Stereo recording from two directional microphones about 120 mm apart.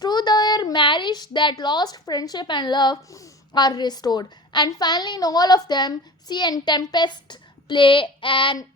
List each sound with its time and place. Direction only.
0.0 s a woman's voice: 35° left (ahead or behind)